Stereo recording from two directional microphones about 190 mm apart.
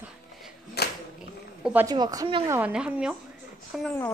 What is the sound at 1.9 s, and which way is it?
Speech, 20° right (ahead or behind).